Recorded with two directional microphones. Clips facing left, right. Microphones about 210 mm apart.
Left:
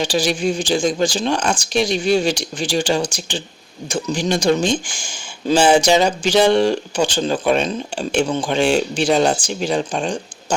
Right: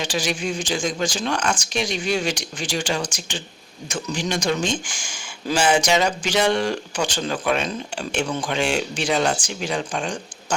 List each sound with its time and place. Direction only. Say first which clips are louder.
0.0 s speech: left 6 dB; 35° left (ahead or behind)